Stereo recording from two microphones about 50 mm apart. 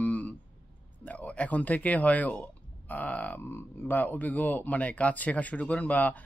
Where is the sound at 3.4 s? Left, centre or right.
Left.